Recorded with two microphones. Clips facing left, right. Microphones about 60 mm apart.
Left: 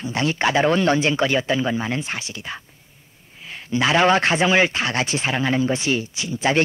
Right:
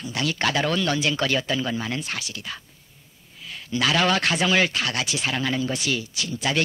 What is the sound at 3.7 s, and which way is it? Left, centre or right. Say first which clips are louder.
Speech: left 5 dB; left.